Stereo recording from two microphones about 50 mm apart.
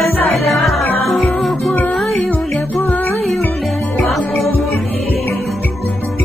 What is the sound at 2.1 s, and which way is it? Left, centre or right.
Music, left.